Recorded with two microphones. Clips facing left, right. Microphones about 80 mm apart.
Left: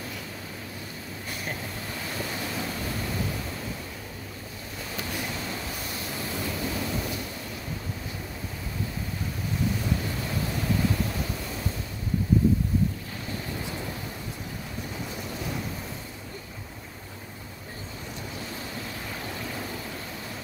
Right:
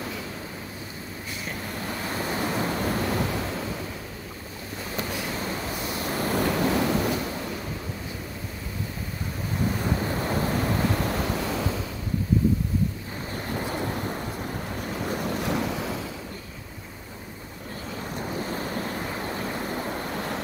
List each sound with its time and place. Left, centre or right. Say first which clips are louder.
2.1 s waves: right 6 dB; right
6.0 s waves: right 9 dB; right
9.8 s waves: right 3 dB; right
13.5 s waves: right 5 dB; right
18.1 s waves: right 8 dB; right